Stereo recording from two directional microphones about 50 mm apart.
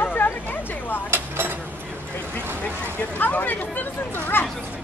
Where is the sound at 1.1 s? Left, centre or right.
Right.